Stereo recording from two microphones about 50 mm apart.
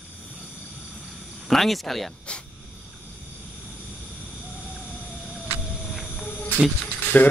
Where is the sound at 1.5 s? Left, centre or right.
Centre.